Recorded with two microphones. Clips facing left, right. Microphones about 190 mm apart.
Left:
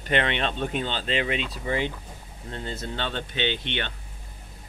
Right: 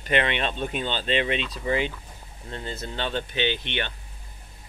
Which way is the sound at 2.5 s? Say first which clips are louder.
Even; 25° left (ahead or behind).